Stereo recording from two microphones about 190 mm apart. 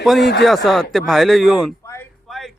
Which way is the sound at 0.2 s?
60° left (ahead or behind).